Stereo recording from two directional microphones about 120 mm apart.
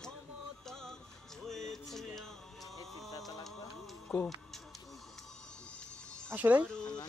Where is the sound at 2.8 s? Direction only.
Centre (ahead or behind).